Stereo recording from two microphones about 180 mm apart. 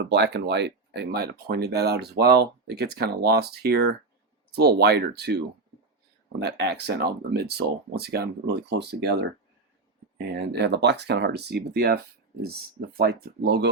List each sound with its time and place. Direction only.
0.0 s speech: 70° right (ahead or behind)
6.4 s speech: 70° right (ahead or behind)
13.0 s speech: 60° right (ahead or behind)